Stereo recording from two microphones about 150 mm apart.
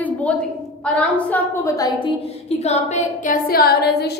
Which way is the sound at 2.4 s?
45° left (ahead or behind).